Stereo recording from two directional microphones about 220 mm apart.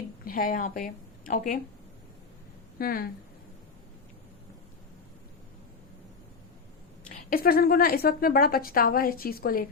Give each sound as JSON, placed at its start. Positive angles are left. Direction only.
{"t": 0.3, "sound": "speech", "side_deg": 40}
{"t": 2.7, "sound": "speech", "side_deg": 40}
{"t": 7.1, "sound": "a woman's voice", "side_deg": 40}